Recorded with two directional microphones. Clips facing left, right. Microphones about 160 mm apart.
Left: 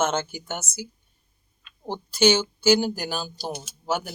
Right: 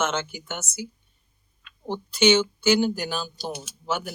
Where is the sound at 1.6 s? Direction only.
35° left (ahead or behind).